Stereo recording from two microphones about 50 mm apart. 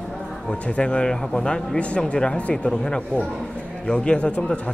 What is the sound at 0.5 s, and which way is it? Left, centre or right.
Speech, left.